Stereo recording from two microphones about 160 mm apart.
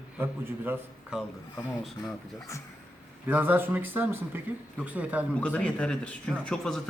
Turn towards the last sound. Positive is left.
turn(degrees=5)  # may be behind; listen again after turning